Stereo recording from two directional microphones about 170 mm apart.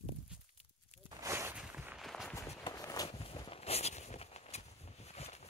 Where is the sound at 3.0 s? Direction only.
35° left (ahead or behind).